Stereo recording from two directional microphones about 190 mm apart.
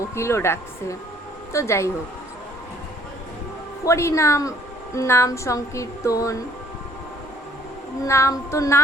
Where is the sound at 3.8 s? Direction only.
15° left (ahead or behind).